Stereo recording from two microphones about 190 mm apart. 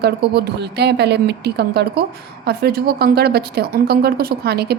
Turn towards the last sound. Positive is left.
turn(degrees=-55)  # may be behind; listen again after turning